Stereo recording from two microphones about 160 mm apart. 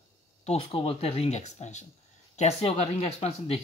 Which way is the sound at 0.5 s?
35° left (ahead or behind).